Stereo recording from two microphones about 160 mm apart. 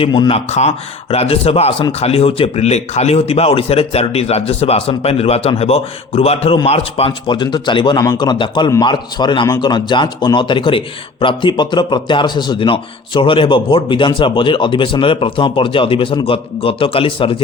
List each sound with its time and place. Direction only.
0.0 s speech: 30° left (ahead or behind)
0.3 s speech: 45° left (ahead or behind)